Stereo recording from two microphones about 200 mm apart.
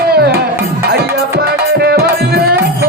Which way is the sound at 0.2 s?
55° right (ahead or behind).